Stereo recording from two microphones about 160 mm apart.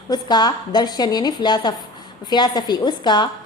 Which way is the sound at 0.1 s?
25° left (ahead or behind).